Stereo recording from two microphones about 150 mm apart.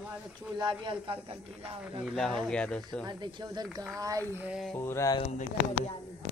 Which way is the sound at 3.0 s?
30° right (ahead or behind).